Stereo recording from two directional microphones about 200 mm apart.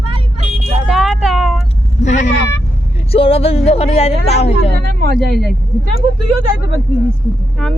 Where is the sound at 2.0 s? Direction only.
35° left (ahead or behind).